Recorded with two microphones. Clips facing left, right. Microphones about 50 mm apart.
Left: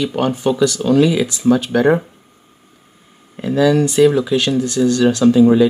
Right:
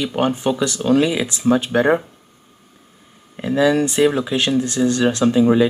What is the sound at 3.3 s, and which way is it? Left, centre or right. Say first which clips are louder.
Speech: left 2 dB; centre.